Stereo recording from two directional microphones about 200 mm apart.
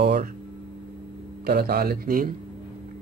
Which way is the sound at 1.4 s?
50° right (ahead or behind).